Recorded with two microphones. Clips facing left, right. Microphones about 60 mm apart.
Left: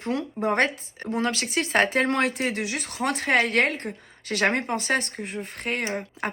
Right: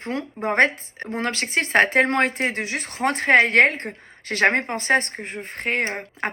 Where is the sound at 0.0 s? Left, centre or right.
Right.